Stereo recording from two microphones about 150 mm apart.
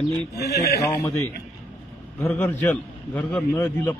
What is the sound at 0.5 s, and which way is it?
Speech, 90° left.